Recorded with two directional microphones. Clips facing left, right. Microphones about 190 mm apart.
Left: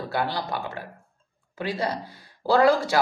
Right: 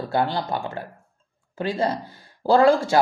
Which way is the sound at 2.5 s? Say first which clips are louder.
Right 3 dB; 25° right (ahead or behind).